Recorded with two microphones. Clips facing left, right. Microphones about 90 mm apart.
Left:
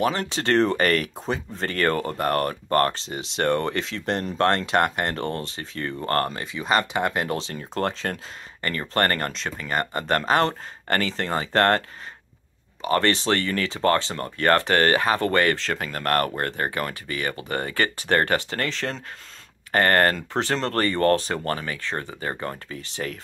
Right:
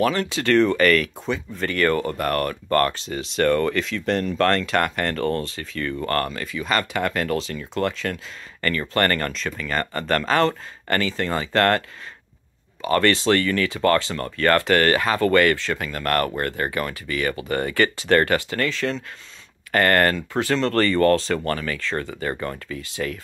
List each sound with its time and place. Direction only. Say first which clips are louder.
0.0 s speech: right 2 dB; 30° left (ahead or behind)
12.8 s speech: right 3 dB; 25° left (ahead or behind)
15.7 s speech: right 1 dB; 40° left (ahead or behind)